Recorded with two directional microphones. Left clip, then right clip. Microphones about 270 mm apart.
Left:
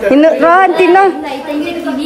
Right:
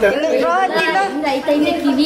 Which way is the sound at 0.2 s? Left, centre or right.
Left.